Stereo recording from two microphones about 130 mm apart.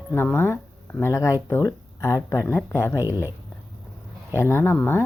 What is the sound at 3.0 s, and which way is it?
Speech, 15° right (ahead or behind).